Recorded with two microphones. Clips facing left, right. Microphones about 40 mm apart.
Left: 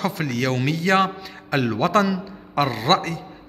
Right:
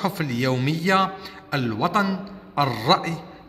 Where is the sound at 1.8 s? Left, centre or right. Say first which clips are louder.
Left 2 dB; left.